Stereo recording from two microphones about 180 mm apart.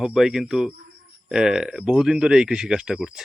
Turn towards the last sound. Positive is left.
turn(degrees=0)  # may be behind; listen again after turning